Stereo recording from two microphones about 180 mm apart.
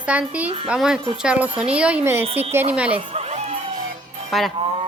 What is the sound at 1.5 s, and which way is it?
Speech, 30° right (ahead or behind).